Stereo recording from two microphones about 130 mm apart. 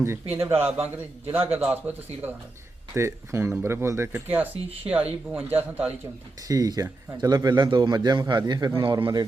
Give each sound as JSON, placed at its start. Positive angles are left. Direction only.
{"t": 0.0, "sound": "a man's voice", "side_deg": -20}
{"t": 6.5, "sound": "a man's voice", "side_deg": -30}
{"t": 8.8, "sound": "a man's voice", "side_deg": -40}